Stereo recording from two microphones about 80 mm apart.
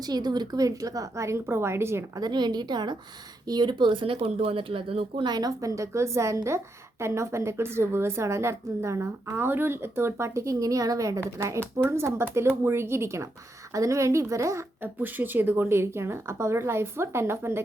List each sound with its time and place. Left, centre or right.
0.1 s a woman's voice: right
2.1 s a woman's voice: right
5.1 s a woman's voice: right
15.0 s a woman's voice: right